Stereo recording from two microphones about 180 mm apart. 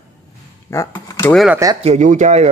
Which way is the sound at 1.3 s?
Centre (ahead or behind).